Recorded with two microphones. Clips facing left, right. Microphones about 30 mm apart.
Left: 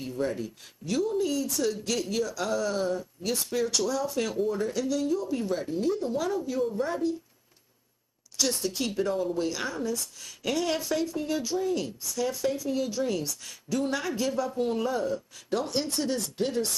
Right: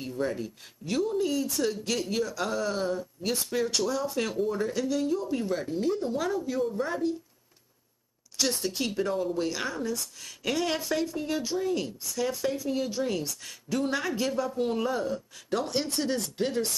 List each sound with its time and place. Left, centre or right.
0.2 s a woman's voice: centre
5.9 s speech: centre
6.6 s speech: centre
8.4 s a woman's voice: centre